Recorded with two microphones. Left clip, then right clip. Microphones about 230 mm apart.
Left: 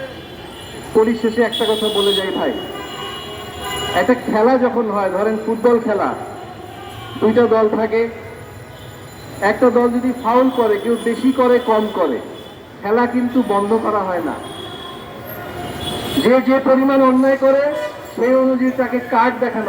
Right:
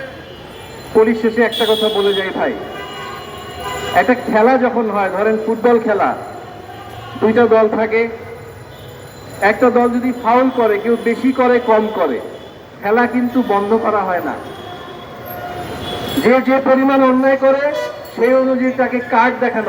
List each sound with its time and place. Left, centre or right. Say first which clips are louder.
0.9 s speech: right 2 dB; right
3.9 s speech: right 3 dB; right
7.2 s speech: right 2 dB; right
9.4 s a man's voice: right 2 dB; right
16.2 s speech: right 1 dB; right